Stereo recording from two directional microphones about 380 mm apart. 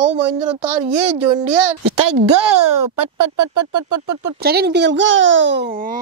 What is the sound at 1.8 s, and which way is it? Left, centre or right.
Speech, right.